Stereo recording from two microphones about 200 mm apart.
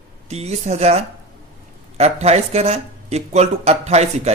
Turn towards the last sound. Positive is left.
turn(degrees=-35)  # may be behind; listen again after turning